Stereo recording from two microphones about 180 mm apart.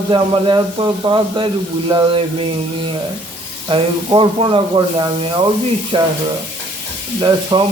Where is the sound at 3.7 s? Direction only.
30° right (ahead or behind).